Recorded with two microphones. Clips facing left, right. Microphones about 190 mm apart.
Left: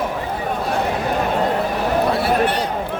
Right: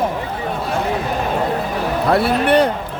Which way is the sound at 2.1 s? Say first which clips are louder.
Right 4 dB; 60° right (ahead or behind).